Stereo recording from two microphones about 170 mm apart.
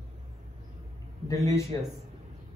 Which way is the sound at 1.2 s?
20° left (ahead or behind).